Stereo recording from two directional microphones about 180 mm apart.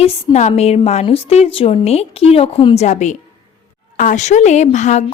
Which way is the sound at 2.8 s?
40° left (ahead or behind).